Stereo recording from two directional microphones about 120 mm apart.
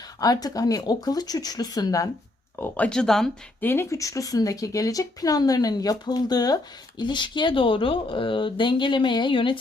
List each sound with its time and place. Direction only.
0.2 s speech: 30° left (ahead or behind)
2.6 s speech: 10° left (ahead or behind)
3.6 s speech: 20° left (ahead or behind); by 9.6 s 45° left (ahead or behind)